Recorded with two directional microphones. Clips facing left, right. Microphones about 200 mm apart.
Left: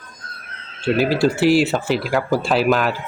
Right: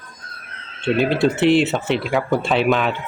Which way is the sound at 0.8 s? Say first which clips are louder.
Even; 5° left (ahead or behind).